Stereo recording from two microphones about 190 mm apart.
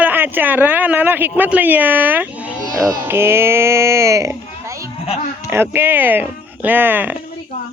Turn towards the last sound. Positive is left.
turn(degrees=-10)  # may be behind; listen again after turning